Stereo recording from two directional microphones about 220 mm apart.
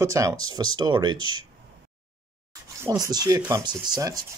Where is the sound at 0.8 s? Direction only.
20° right (ahead or behind).